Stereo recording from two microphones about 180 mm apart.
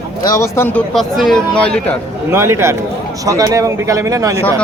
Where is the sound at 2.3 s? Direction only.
15° right (ahead or behind).